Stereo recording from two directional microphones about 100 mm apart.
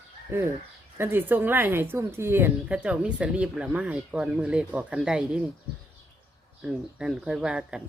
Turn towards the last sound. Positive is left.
turn(degrees=-10)  # may be behind; listen again after turning